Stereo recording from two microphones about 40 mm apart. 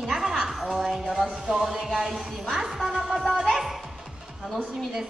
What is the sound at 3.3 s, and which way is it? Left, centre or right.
Music, centre.